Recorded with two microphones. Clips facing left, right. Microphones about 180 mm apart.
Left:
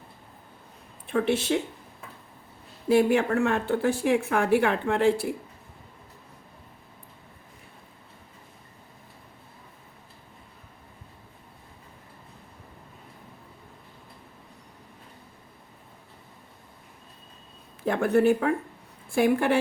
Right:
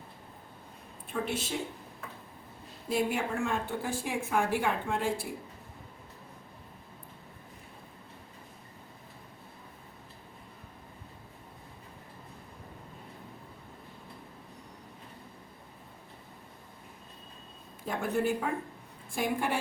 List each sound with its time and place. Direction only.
1.0 s speech: 75° left (ahead or behind)
2.9 s speech: 75° left (ahead or behind)
17.8 s speech: 70° left (ahead or behind)